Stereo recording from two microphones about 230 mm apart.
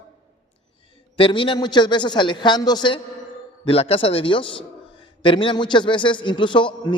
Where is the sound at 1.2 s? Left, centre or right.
Left.